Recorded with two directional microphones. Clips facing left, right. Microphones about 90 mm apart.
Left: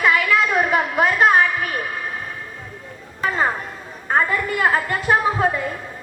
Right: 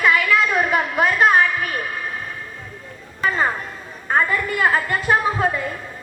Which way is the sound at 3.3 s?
30° left (ahead or behind).